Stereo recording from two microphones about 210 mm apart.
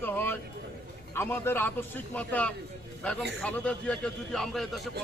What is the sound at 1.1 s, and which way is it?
A man's voice, 10° left (ahead or behind).